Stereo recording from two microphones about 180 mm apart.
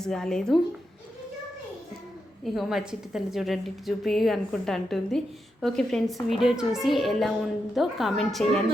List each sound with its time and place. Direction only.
0.0 s a woman's voice: 5° left (ahead or behind)
2.4 s a woman's voice: centre (ahead or behind)